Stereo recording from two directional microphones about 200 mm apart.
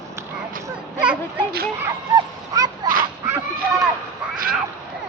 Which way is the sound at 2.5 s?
20° right (ahead or behind).